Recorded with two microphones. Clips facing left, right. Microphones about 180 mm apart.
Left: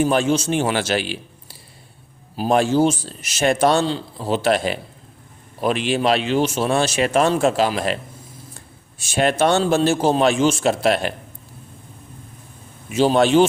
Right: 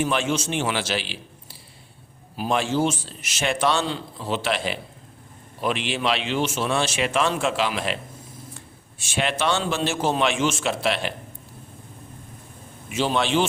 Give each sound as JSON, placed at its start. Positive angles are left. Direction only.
{"t": 0.0, "sound": "a man's voice", "side_deg": 40}
{"t": 12.9, "sound": "a man's voice", "side_deg": 40}